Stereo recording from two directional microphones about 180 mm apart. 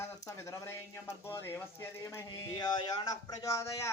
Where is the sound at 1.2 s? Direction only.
10° left (ahead or behind).